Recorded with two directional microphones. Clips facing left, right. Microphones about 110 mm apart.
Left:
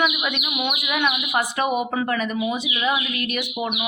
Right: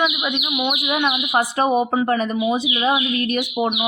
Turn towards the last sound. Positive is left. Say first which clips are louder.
# right 6 dB
turn(degrees=-30)  # may be behind; listen again after turning